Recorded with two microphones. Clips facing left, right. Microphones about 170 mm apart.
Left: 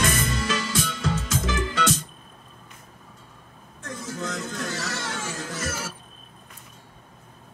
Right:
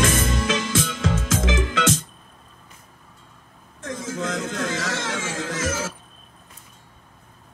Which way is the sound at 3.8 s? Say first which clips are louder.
Right 4 dB; 90° right.